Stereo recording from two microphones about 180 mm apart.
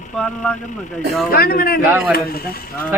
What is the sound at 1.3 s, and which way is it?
Speech, 55° left (ahead or behind).